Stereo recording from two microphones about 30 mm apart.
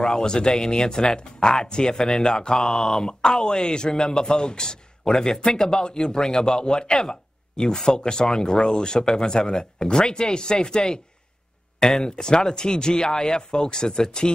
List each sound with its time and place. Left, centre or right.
0.2 s speech: left
2.0 s speech: centre
2.3 s speech: left
2.6 s speech: centre
3.1 s speech: left
5.1 s speech: centre
6.2 s speech: centre
11.8 s speech: left